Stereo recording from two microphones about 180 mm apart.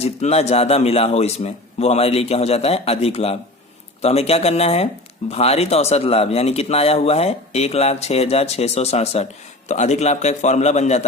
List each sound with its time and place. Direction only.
0.0 s speech: 35° left (ahead or behind)